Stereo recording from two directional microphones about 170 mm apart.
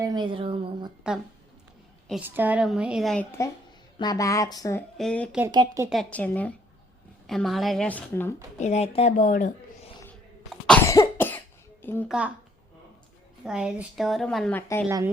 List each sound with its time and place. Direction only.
0.0 s speech: 25° right (ahead or behind)
1.1 s a woman's voice: 5° right (ahead or behind)
2.2 s a woman's voice: 10° right (ahead or behind)
3.9 s a woman's voice: 25° left (ahead or behind)
4.9 s a woman's voice: 5° left (ahead or behind)
5.5 s speech: 20° right (ahead or behind)
5.9 s a woman's voice: 5° left (ahead or behind)
8.5 s a woman's voice: 45° left (ahead or behind)
10.8 s cough: 20° left (ahead or behind)
11.8 s a child's voice: 10° left (ahead or behind)
12.0 s a woman's voice: 5° right (ahead or behind)
13.4 s a woman's voice: 5° right (ahead or behind)
14.8 s speech: 15° right (ahead or behind)